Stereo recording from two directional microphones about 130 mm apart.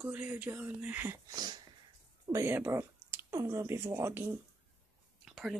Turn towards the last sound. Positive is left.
turn(degrees=0)  # may be behind; listen again after turning